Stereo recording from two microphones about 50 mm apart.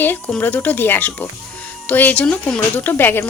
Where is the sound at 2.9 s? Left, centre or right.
Left.